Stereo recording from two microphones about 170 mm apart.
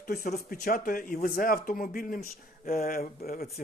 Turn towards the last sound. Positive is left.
turn(degrees=60)  # may be behind; listen again after turning